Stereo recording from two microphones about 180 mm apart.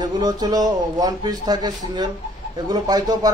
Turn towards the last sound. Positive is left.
turn(degrees=-20)  # may be behind; listen again after turning